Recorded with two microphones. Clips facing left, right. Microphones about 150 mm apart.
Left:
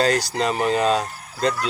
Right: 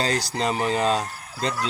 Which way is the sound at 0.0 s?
25° right (ahead or behind).